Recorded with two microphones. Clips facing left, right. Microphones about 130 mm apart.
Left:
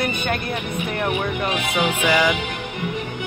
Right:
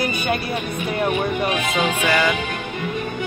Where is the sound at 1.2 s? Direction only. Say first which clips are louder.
Right 2 dB; 15° right (ahead or behind).